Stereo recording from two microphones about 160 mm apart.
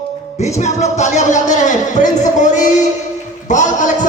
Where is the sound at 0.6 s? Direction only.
45° left (ahead or behind).